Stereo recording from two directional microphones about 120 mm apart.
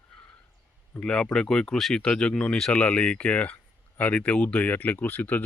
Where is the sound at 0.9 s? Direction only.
10° left (ahead or behind).